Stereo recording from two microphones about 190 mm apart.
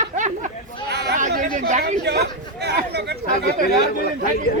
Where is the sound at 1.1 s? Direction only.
45° right (ahead or behind).